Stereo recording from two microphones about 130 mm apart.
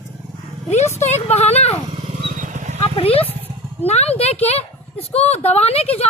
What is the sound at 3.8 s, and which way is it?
A woman's voice, 55° left (ahead or behind).